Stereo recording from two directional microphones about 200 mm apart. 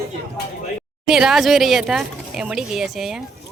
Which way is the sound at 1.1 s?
Centre (ahead or behind).